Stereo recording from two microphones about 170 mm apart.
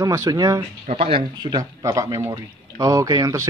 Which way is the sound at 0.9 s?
35° right (ahead or behind).